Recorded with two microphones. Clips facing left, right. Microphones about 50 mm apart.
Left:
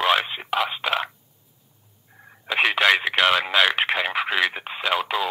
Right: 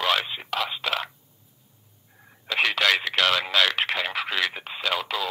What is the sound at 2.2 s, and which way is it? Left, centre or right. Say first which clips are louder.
Speech: left 3 dB; centre.